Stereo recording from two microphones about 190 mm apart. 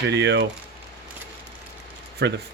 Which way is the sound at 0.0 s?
65° right (ahead or behind).